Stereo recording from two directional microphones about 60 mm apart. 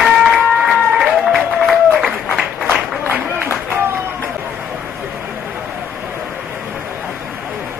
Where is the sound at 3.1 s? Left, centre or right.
Right.